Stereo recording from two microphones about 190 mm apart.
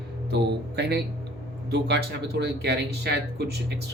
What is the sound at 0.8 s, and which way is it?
Speech, 60° right (ahead or behind).